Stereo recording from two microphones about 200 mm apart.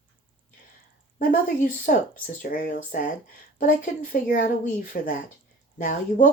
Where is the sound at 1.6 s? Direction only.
40° left (ahead or behind).